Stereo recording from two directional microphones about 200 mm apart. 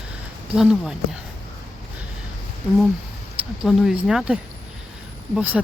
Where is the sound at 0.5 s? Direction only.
5° right (ahead or behind).